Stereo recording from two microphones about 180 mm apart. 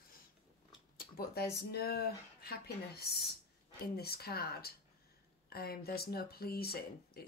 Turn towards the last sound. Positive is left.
turn(degrees=60)  # may be behind; listen again after turning